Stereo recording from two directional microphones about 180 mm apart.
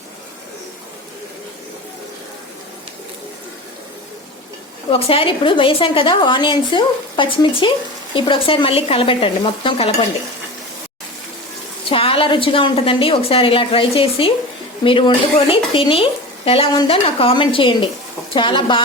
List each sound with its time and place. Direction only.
4.9 s a woman's voice: 30° left (ahead or behind)
11.9 s a woman's voice: 30° left (ahead or behind)